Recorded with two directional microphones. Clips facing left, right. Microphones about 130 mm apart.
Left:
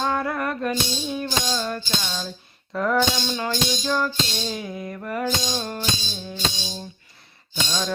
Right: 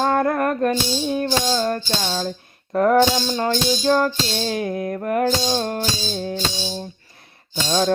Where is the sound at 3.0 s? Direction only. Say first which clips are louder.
Right 6 dB; 35° right (ahead or behind).